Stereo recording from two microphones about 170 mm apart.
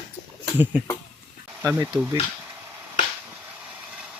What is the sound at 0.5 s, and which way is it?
Speech, 10° right (ahead or behind).